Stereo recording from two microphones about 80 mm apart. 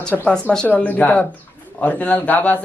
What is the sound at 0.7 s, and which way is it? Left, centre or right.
A woman's voice, left.